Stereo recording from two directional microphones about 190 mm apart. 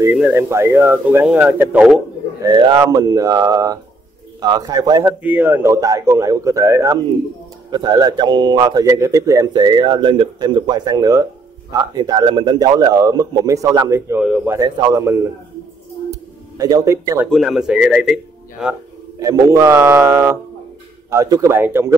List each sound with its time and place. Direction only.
0.0 s speech: 10° right (ahead or behind)
2.4 s a man's voice: 25° right (ahead or behind); by 14.6 s 5° right (ahead or behind)
14.6 s speech: 15° right (ahead or behind)
16.1 s a sound: 20° right (ahead or behind)
17.3 s speech: centre (ahead or behind)
19.1 s speech: 15° right (ahead or behind)